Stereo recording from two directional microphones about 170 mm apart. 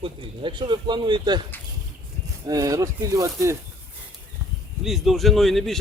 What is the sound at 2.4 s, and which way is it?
Speech, 20° right (ahead or behind).